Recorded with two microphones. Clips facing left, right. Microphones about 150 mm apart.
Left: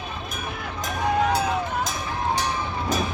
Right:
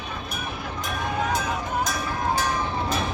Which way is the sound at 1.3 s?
25° left (ahead or behind).